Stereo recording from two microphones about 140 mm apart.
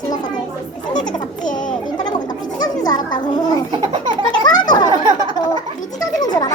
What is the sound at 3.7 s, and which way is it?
Baby laughter, 35° right (ahead or behind).